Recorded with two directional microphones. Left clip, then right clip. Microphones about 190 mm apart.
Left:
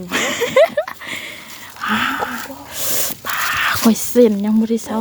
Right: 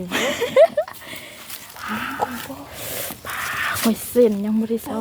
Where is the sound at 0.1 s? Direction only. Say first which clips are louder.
Left 3 dB; 25° left (ahead or behind); by 1.4 s 40° left (ahead or behind).